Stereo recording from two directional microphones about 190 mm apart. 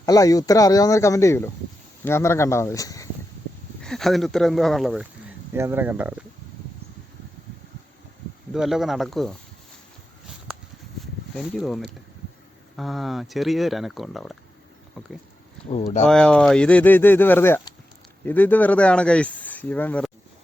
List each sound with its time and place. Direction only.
0.0 s speech: 20° left (ahead or behind)
3.8 s speech: centre (ahead or behind)
5.5 s speech: 10° right (ahead or behind)
8.5 s speech: centre (ahead or behind)
11.5 s speech: centre (ahead or behind)